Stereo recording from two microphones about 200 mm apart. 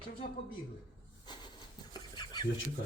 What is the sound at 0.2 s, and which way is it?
Speech, 50° left (ahead or behind).